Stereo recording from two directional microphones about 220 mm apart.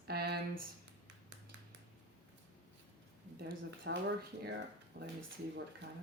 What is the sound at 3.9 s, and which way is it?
Speech, 55° right (ahead or behind).